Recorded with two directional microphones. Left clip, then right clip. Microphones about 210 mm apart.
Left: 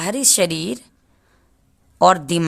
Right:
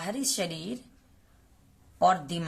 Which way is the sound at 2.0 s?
50° left (ahead or behind).